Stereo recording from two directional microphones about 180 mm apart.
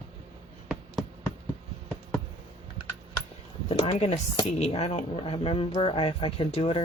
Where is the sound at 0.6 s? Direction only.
Centre (ahead or behind).